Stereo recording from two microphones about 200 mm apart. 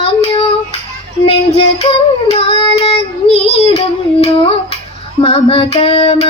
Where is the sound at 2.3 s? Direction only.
30° left (ahead or behind).